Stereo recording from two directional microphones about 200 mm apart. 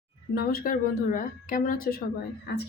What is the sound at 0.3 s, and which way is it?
A woman's voice, 45° left (ahead or behind).